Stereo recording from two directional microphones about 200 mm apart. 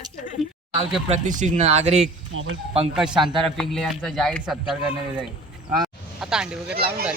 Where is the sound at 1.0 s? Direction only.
35° right (ahead or behind).